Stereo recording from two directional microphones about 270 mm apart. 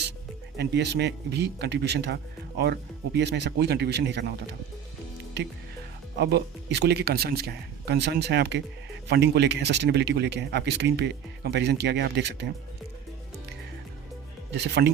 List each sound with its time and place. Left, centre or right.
0.5 s a man's voice: right
6.1 s a man's voice: right
14.5 s a man's voice: right